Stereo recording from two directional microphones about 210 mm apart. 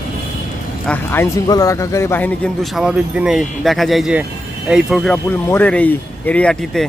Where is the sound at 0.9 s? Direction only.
10° left (ahead or behind).